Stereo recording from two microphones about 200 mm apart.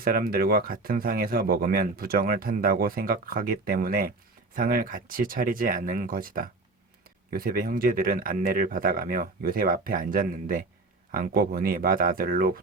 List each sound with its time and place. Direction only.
0.0 s speech: 50° right (ahead or behind)